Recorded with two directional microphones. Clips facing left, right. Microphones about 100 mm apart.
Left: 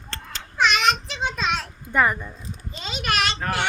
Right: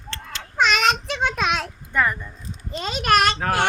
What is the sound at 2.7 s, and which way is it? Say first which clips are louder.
Speech: right 7 dB; 50° right (ahead or behind).